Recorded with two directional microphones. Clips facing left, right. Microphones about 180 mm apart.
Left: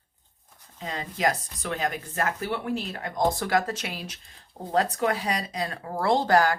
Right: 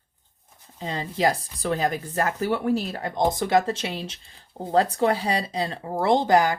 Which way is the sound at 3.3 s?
20° right (ahead or behind).